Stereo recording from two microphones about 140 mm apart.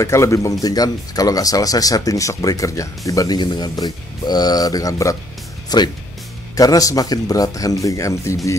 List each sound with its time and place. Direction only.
0.0 s speech: 20° left (ahead or behind)